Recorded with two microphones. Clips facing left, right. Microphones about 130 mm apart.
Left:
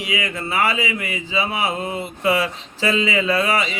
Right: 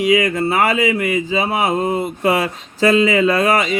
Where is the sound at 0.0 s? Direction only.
45° right (ahead or behind).